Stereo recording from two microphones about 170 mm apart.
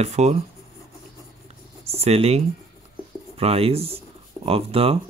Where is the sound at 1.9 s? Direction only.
35° right (ahead or behind).